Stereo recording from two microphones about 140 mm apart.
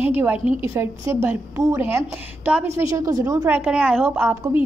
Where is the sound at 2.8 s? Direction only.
25° right (ahead or behind).